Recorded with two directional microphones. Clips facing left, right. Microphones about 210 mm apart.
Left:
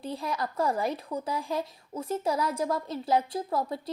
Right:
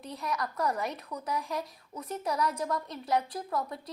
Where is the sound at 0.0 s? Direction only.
30° left (ahead or behind).